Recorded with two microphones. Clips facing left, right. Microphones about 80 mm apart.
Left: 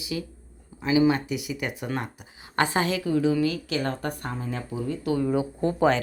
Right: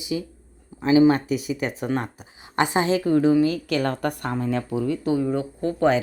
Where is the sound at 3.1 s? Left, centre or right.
Right.